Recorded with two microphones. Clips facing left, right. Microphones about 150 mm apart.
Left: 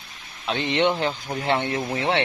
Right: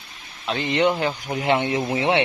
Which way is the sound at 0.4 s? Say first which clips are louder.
Right 1 dB; centre (ahead or behind).